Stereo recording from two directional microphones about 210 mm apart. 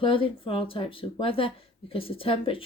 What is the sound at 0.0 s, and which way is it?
Speech, 25° left (ahead or behind).